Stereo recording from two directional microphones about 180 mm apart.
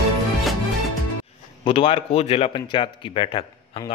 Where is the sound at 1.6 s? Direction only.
30° left (ahead or behind).